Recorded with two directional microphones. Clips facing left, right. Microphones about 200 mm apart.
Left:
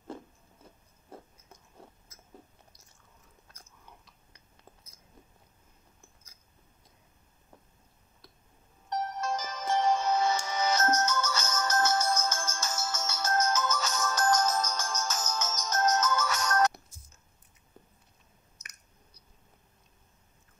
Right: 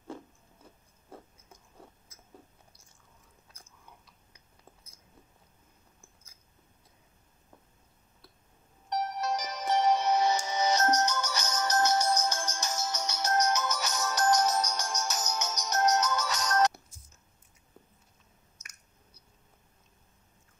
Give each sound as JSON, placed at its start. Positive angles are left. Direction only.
{"t": 8.8, "sound": "music", "side_deg": -15}